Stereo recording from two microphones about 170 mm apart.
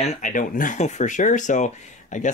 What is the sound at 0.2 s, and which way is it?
Speech, 50° left (ahead or behind).